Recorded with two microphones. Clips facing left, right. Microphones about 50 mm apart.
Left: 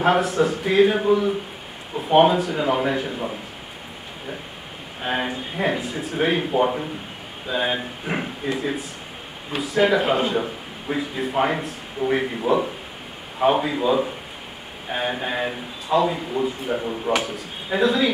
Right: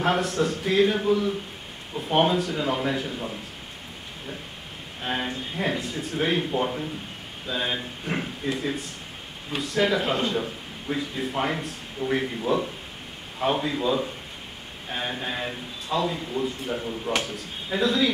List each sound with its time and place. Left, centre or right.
0.0 s speech: centre
5.0 s speech: centre
9.8 s a man's voice: centre
17.1 s speech: centre